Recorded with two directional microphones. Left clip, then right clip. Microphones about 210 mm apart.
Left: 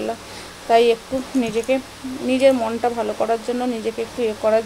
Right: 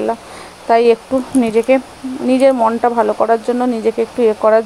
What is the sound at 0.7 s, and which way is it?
Speech, 20° right (ahead or behind).